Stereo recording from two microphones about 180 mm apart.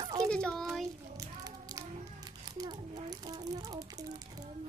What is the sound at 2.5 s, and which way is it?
A child's voice, 20° right (ahead or behind).